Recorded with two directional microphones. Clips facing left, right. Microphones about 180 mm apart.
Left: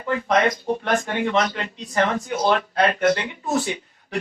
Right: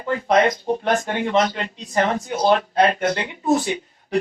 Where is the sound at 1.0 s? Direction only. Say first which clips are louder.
Right 2 dB; 35° right (ahead or behind).